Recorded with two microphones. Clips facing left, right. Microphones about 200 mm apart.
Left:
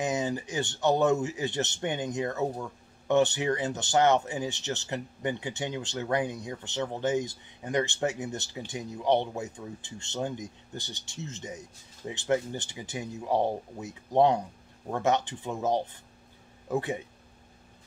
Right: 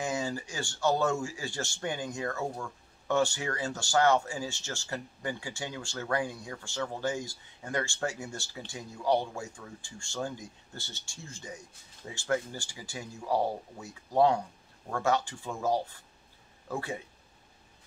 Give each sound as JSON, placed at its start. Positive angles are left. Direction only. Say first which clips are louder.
{"t": 0.0, "sound": "speech", "louder": "left 3 dB", "side_deg": 20}